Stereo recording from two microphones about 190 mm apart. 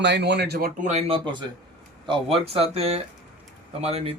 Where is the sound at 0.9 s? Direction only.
30° right (ahead or behind).